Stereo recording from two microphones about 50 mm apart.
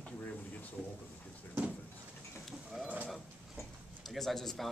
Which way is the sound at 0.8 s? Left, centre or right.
Centre.